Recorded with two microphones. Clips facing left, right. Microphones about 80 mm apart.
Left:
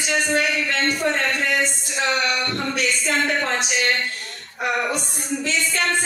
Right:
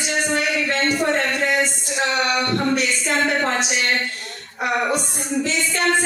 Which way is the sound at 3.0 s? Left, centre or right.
Right.